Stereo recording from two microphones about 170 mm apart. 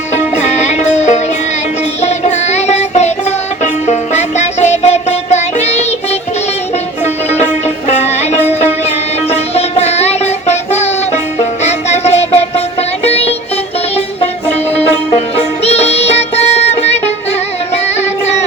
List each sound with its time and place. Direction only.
0.1 s music: 40° left (ahead or behind)
7.0 s music: 40° left (ahead or behind)
15.6 s music: 40° left (ahead or behind)